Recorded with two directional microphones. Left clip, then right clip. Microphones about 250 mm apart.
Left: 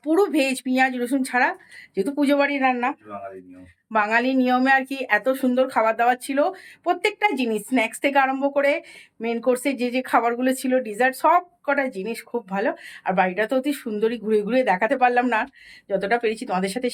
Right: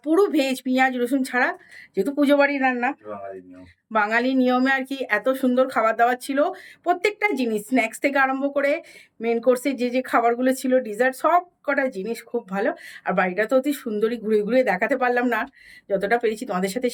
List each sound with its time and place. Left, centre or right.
0.0 s speech: centre
3.9 s speech: centre